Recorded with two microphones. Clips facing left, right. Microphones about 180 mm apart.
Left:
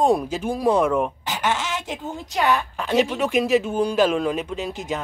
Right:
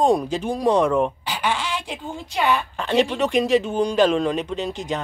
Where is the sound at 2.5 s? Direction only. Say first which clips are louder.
Right 2 dB; 5° left (ahead or behind).